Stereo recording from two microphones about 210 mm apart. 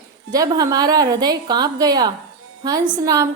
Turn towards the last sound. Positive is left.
turn(degrees=-15)  # may be behind; listen again after turning